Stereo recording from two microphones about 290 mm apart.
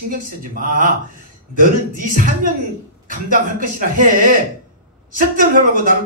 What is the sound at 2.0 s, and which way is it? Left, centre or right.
A man's voice, right.